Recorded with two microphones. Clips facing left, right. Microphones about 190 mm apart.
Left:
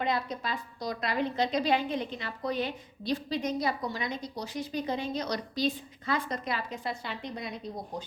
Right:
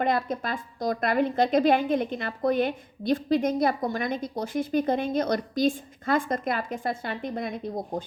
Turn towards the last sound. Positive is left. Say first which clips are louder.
# right 7 dB
turn(degrees=-50)  # may be behind; listen again after turning